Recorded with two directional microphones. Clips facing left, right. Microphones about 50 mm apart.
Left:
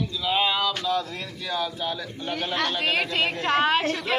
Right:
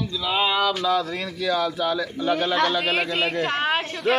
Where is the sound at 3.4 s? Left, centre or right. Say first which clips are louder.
Left 2 dB; centre.